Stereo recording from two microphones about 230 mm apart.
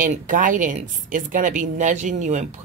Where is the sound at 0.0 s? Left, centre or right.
Right.